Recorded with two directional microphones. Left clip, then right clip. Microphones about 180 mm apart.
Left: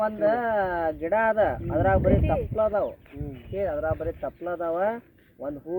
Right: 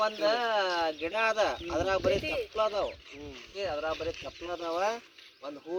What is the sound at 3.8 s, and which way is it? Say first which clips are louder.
Speech: left 5 dB; 25° right (ahead or behind).